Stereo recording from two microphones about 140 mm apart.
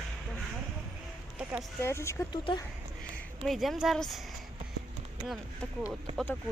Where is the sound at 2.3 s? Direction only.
35° left (ahead or behind).